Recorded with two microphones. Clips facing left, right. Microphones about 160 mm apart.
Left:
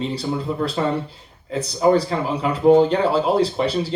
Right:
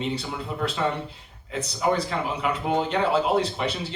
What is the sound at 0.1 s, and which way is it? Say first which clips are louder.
Speech: left 6 dB; 35° left (ahead or behind).